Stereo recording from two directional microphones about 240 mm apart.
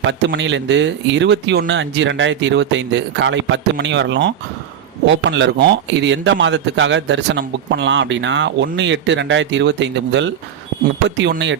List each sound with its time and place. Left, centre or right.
0.0 s a man's voice: right